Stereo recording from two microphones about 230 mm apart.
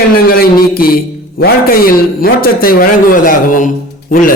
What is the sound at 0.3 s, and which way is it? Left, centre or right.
A man's voice, left.